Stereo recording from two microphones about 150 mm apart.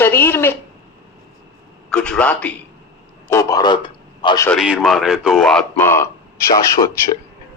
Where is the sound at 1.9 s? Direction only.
5° left (ahead or behind).